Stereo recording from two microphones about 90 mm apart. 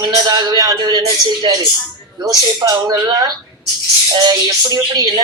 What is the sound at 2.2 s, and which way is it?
Speech, 40° right (ahead or behind).